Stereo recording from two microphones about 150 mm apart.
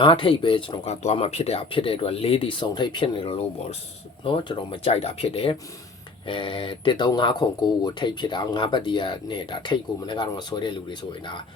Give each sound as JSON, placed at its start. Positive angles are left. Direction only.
{"t": 0.0, "sound": "speech", "side_deg": 35}
{"t": 0.9, "sound": "speech", "side_deg": 45}